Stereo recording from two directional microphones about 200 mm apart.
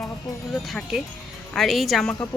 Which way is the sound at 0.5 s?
Centre (ahead or behind).